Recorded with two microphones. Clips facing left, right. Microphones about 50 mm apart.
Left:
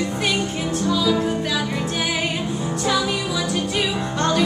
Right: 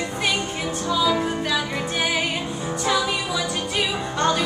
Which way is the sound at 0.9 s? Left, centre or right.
Centre.